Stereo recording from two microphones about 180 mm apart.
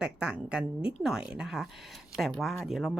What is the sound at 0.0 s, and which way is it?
A woman's voice, 5° right (ahead or behind).